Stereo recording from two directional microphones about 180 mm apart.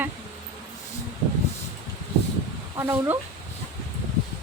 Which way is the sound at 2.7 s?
15° right (ahead or behind).